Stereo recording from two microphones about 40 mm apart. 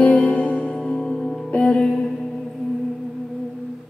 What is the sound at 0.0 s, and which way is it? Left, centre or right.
Music, left.